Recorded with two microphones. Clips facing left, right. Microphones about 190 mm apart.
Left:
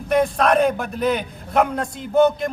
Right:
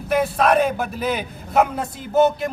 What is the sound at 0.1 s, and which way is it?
A man's voice, 5° right (ahead or behind).